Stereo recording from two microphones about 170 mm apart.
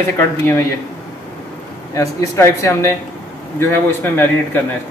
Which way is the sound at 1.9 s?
15° left (ahead or behind).